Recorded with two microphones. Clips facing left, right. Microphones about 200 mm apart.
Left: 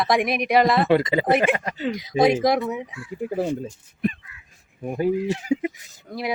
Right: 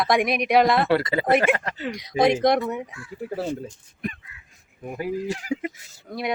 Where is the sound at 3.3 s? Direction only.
15° left (ahead or behind).